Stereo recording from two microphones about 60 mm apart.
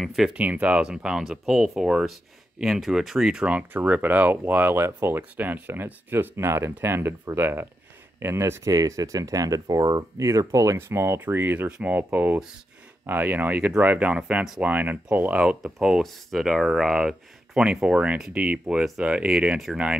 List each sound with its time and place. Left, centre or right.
0.0 s speech: centre
0.3 s speech: right
3.4 s speech: right
4.7 s speech: right
10.2 s speech: right
10.8 s speech: right
11.1 s speech: right
14.1 s speech: centre
14.6 s speech: right
15.6 s speech: centre
19.3 s speech: centre